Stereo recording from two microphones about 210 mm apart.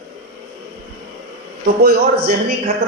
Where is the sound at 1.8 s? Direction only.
50° right (ahead or behind).